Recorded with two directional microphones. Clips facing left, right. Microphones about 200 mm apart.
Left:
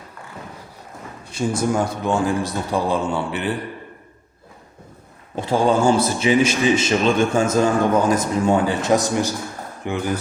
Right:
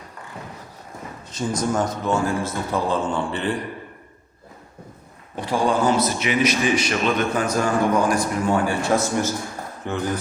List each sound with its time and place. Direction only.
1.3 s a man's voice: 10° left (ahead or behind)
5.4 s a man's voice: 25° left (ahead or behind)